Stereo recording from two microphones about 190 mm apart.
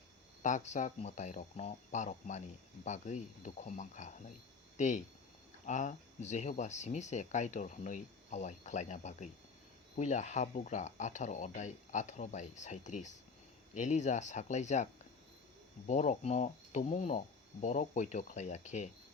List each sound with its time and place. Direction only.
0.4 s speech: 40° left (ahead or behind)
15.9 s speech: 40° left (ahead or behind)